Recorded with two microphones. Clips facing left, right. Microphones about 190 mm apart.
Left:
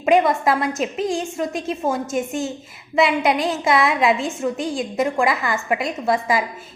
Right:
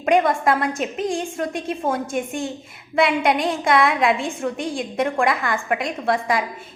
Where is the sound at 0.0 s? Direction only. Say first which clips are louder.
Left 1 dB; 5° left (ahead or behind).